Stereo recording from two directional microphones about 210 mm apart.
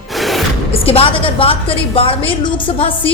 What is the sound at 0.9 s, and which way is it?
A woman's voice, 25° left (ahead or behind).